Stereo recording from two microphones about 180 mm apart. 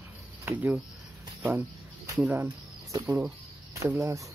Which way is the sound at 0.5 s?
10° right (ahead or behind).